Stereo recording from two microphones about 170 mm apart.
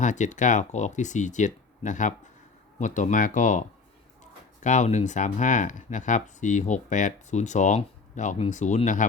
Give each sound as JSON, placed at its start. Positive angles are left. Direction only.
{"t": 0.0, "sound": "speech", "side_deg": 45}